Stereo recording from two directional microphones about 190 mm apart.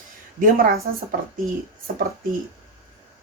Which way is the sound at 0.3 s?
45° right (ahead or behind).